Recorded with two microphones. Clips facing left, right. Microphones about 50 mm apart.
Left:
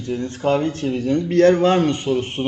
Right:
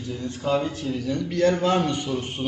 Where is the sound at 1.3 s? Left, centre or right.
Left.